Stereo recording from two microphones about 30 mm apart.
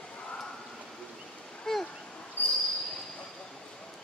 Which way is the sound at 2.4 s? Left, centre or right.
Left.